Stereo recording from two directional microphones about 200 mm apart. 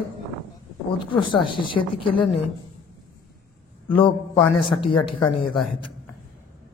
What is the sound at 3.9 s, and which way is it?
Speech, 25° left (ahead or behind).